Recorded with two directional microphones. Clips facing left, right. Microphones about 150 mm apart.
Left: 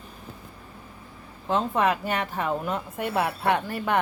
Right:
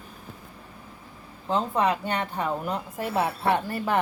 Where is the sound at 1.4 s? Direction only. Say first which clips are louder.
Left 1 dB; centre (ahead or behind).